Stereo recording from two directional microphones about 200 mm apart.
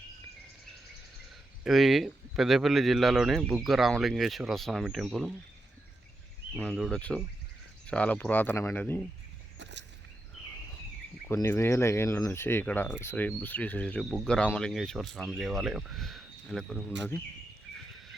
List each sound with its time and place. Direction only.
1.6 s speech: centre (ahead or behind)
6.6 s speech: centre (ahead or behind)
9.6 s a sound: 65° right (ahead or behind)
11.3 s speech: 15° left (ahead or behind)